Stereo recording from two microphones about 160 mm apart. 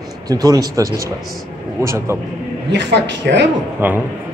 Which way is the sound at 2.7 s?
90° right.